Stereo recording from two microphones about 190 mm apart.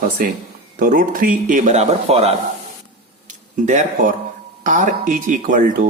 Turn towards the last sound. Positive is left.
turn(degrees=-45)  # may be behind; listen again after turning